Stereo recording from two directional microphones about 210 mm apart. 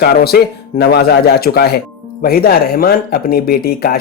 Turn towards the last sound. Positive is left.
turn(degrees=45)  # may be behind; listen again after turning